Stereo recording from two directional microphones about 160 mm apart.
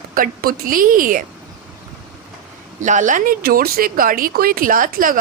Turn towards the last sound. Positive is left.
turn(degrees=-60)  # may be behind; listen again after turning